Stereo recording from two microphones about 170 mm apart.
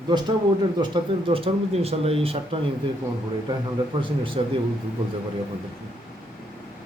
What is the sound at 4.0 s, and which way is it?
Speech, 30° right (ahead or behind).